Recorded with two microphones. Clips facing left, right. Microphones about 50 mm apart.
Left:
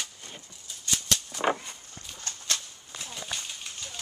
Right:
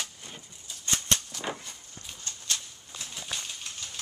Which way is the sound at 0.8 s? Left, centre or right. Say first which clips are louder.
Right 1 dB; right.